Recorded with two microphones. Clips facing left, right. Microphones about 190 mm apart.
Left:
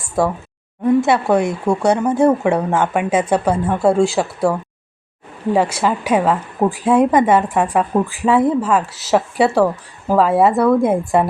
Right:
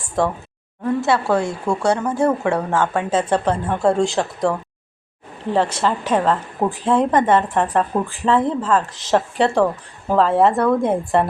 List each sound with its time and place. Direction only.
0.2 s a woman's voice: 10° left (ahead or behind)
5.5 s a woman's voice: 10° left (ahead or behind)